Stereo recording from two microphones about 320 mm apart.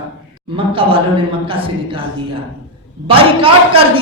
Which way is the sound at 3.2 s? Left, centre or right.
Centre.